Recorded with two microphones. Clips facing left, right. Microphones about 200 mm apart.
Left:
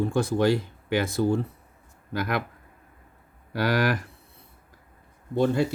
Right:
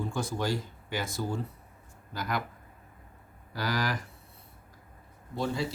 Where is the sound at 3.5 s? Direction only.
60° left (ahead or behind).